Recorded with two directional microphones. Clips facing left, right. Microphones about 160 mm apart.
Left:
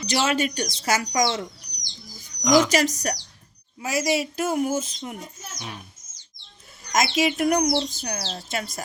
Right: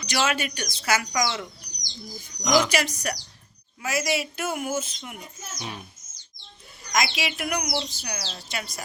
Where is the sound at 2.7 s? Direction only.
40° left (ahead or behind).